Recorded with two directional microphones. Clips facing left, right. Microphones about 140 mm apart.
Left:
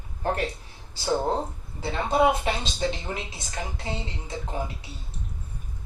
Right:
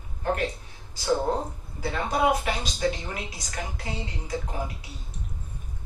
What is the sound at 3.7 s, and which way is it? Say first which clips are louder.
Speech: left 1 dB; 25° left (ahead or behind).